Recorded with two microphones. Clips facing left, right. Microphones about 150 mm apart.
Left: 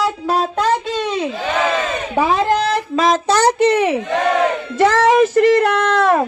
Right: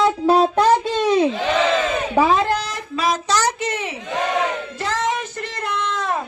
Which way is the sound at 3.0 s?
50° left (ahead or behind).